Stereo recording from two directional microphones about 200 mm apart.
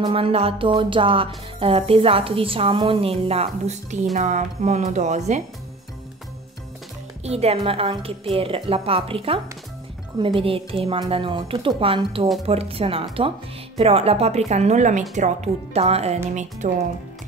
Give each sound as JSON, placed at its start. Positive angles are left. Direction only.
{"t": 0.0, "sound": "speech", "side_deg": -30}
{"t": 7.2, "sound": "a woman's voice", "side_deg": -30}